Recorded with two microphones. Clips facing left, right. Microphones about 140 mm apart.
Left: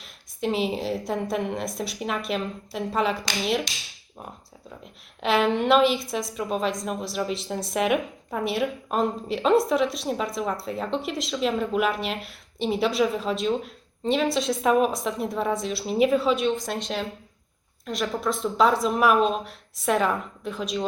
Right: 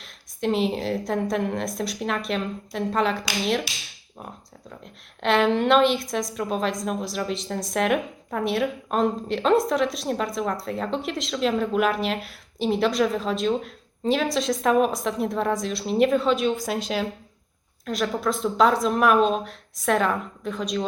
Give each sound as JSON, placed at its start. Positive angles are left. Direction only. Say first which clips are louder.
{"t": 0.0, "sound": "a woman's voice", "louder": "right 2 dB", "side_deg": 0}
{"t": 5.2, "sound": "a woman's voice", "louder": "right 2 dB", "side_deg": 5}